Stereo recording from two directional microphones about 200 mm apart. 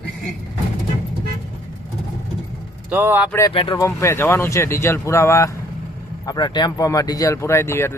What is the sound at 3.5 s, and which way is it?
Speech, 25° left (ahead or behind).